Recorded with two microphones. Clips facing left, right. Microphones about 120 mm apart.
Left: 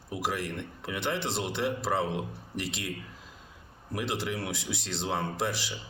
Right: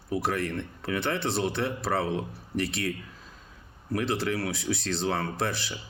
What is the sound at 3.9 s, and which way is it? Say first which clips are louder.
Speech: right 4 dB; 15° left (ahead or behind).